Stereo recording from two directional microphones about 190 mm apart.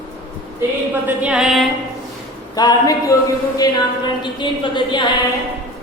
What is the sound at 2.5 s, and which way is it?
A woman's voice, 20° left (ahead or behind).